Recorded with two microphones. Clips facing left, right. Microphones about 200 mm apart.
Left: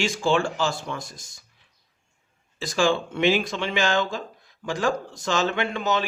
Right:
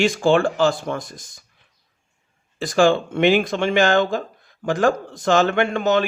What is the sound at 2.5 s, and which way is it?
Speech, 55° right (ahead or behind).